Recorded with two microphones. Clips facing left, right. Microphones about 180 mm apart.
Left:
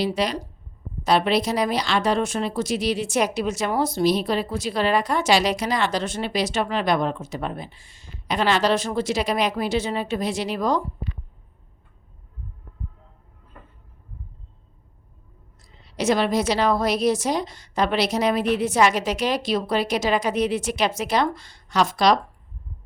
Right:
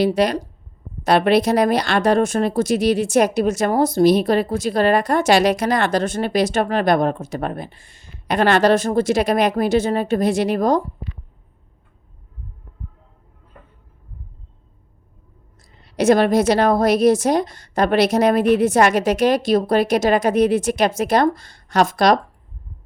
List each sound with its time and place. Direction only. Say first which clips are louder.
0.0 s speech: right 6 dB; 50° right (ahead or behind)
15.7 s speech: right 7 dB; 55° right (ahead or behind)